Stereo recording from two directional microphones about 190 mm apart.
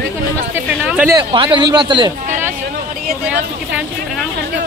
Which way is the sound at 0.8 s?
5° right (ahead or behind).